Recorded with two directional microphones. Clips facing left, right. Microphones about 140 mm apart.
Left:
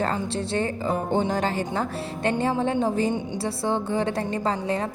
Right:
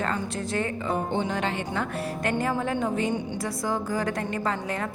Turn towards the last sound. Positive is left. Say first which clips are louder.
# left 3 dB
turn(degrees=30)  # may be behind; listen again after turning